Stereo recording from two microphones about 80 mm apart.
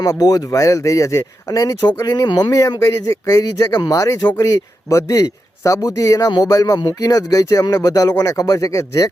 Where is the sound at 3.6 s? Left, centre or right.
Left.